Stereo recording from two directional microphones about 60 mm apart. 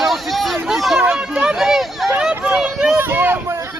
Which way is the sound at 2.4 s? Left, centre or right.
Centre.